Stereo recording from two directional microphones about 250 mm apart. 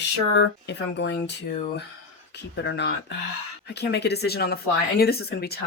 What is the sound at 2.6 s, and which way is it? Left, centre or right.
Speech, left.